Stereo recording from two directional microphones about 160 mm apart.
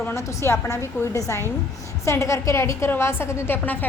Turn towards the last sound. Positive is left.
turn(degrees=15)  # may be behind; listen again after turning